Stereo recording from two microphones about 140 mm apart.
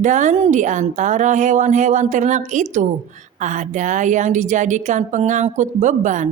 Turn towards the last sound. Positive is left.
turn(degrees=-60)  # may be behind; listen again after turning